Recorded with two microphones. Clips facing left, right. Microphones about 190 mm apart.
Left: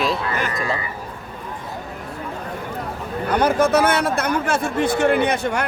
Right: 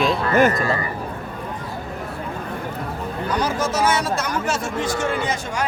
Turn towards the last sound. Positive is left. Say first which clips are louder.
# left 6 dB
turn(degrees=60)  # may be behind; listen again after turning